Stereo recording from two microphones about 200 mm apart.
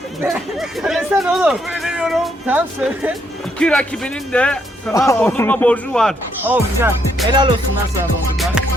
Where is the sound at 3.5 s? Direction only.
5° left (ahead or behind).